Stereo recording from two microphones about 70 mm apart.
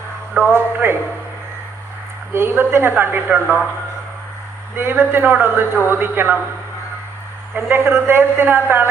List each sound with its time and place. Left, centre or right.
0.5 s a sound: right
2.3 s a woman's voice: right
4.8 s a woman's voice: right
7.5 s a woman's voice: right